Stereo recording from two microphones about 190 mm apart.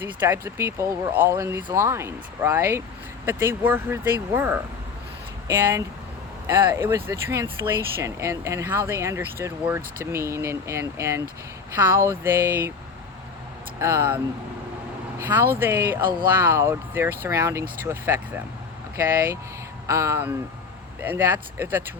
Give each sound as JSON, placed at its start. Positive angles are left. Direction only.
{"t": 0.0, "sound": "speech", "side_deg": -10}
{"t": 13.7, "sound": "speech", "side_deg": -15}
{"t": 15.2, "sound": "speech", "side_deg": -10}